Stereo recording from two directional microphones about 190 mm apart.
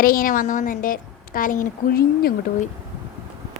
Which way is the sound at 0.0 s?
50° left (ahead or behind).